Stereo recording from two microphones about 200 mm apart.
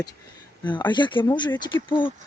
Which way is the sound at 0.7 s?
25° left (ahead or behind).